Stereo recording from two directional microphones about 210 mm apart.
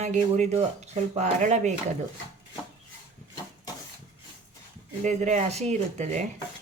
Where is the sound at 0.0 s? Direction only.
35° right (ahead or behind).